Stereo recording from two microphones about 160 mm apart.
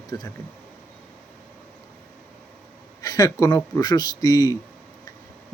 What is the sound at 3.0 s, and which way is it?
Speech, 20° left (ahead or behind).